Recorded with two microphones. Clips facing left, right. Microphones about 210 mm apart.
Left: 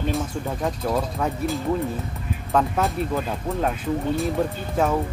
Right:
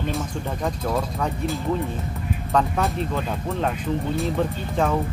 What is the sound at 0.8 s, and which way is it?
Speech, 5° left (ahead or behind).